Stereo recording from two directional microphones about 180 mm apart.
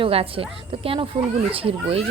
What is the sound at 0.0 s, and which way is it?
A child's voice, 30° right (ahead or behind).